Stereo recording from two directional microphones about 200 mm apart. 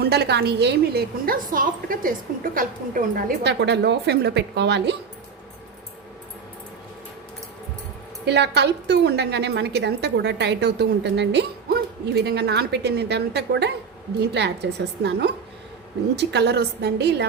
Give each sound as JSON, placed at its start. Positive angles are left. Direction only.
{"t": 0.0, "sound": "a woman's voice", "side_deg": -55}
{"t": 8.2, "sound": "a woman's voice", "side_deg": -55}